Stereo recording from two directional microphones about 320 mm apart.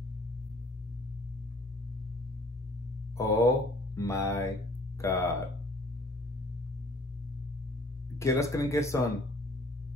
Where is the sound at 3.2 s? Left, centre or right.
Centre.